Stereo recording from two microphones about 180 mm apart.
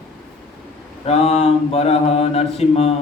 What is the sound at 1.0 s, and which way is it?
A man's voice, 35° left (ahead or behind).